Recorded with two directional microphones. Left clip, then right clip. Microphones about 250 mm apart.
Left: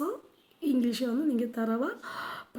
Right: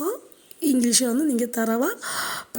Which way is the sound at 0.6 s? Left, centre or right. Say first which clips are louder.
Right 8 dB; right.